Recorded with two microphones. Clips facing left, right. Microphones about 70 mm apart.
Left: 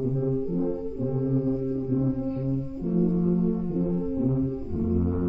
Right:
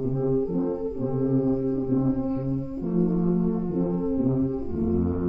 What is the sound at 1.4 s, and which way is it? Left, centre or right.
Foghorn, right.